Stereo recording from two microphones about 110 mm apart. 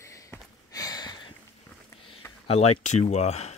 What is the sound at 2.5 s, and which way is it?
Speech, 70° left (ahead or behind).